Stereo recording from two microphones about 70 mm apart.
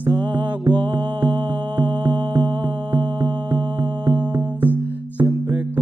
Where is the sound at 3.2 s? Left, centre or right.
Right.